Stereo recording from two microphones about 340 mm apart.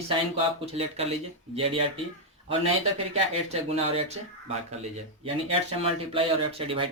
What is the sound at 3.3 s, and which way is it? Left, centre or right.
Speech, centre.